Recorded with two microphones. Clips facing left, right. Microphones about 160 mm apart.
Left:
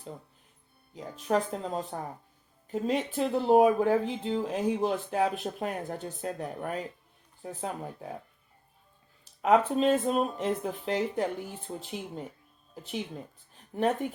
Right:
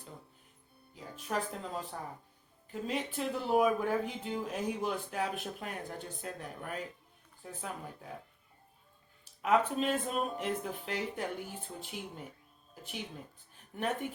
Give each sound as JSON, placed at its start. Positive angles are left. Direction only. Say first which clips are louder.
{"t": 1.6, "sound": "speech", "louder": "left 6 dB", "side_deg": 35}
{"t": 9.4, "sound": "speech", "louder": "left 6 dB", "side_deg": 35}
{"t": 13.7, "sound": "speech", "louder": "left 7 dB", "side_deg": 40}